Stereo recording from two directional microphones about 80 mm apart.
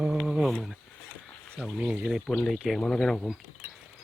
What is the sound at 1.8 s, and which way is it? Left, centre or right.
Speech, centre.